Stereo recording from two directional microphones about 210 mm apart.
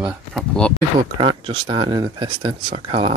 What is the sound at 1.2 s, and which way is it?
Speech, 25° right (ahead or behind).